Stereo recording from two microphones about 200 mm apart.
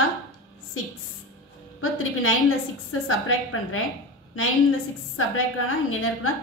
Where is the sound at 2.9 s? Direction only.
90° left.